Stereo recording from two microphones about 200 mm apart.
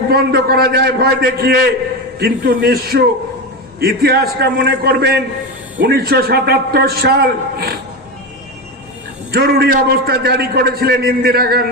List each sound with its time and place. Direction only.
0.1 s a man's voice: 50° right (ahead or behind)
9.3 s a man's voice: 50° right (ahead or behind)